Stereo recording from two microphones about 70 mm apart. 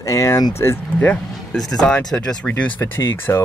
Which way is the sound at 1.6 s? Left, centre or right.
Centre.